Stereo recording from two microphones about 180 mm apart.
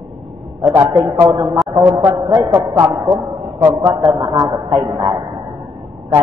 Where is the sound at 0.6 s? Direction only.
20° right (ahead or behind).